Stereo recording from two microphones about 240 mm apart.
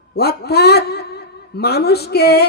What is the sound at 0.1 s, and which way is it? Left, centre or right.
A man's voice, left.